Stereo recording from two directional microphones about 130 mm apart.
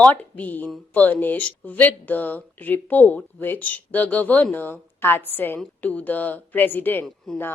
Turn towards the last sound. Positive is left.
turn(degrees=5)  # may be behind; listen again after turning